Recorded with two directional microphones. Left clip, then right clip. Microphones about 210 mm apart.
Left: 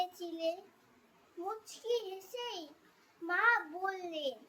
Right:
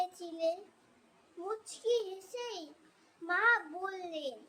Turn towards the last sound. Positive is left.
turn(degrees=-15)  # may be behind; listen again after turning